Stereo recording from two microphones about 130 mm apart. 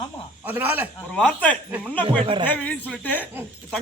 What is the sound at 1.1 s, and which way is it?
Speech, 10° left (ahead or behind).